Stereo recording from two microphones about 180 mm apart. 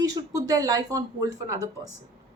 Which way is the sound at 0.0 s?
20° right (ahead or behind).